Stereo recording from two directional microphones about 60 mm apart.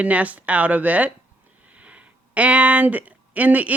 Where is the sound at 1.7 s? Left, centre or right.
Right.